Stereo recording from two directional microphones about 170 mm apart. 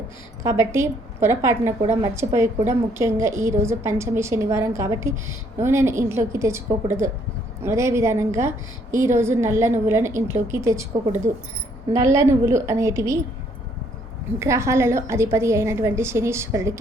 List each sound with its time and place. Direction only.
0.4 s a woman's voice: 15° right (ahead or behind)
11.9 s a woman's voice: 20° right (ahead or behind)
14.3 s a woman's voice: 15° right (ahead or behind)